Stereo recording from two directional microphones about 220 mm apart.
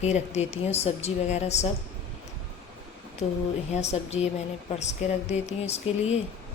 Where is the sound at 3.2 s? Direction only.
30° left (ahead or behind).